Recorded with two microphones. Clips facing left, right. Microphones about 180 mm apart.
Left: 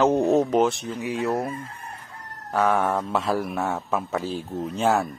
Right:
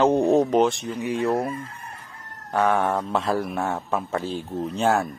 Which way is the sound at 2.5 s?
Centre (ahead or behind).